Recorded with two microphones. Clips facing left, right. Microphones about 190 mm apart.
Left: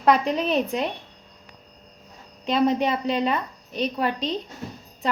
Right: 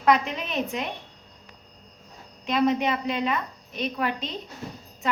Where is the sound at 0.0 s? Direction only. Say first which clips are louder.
Left 3 dB; 35° left (ahead or behind).